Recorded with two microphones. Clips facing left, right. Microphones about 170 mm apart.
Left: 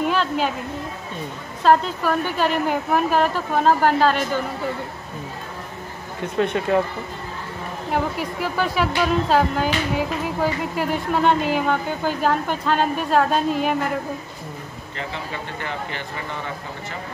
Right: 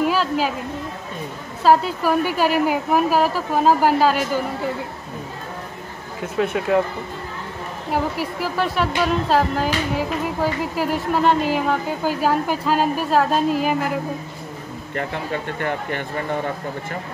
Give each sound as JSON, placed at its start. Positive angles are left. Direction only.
{"t": 0.0, "sound": "a sound", "side_deg": -5}
{"t": 1.6, "sound": "a woman's voice", "side_deg": -5}
{"t": 6.2, "sound": "a woman's voice", "side_deg": -5}
{"t": 7.9, "sound": "a woman's voice", "side_deg": 0}
{"t": 15.0, "sound": "speech", "side_deg": -50}